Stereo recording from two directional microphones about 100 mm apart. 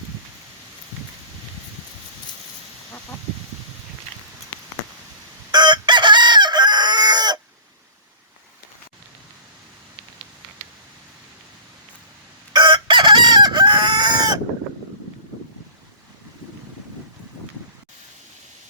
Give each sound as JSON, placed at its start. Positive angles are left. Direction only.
{"t": 5.5, "sound": "chicken", "side_deg": -50}
{"t": 12.5, "sound": "chicken", "side_deg": -50}